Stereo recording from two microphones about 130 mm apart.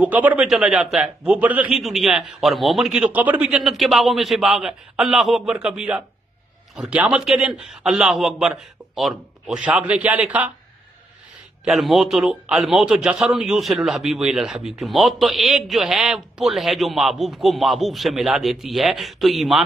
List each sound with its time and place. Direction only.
0.0 s a man's voice: 10° right (ahead or behind)
1.8 s a man's voice: centre (ahead or behind)
11.6 s a man's voice: centre (ahead or behind)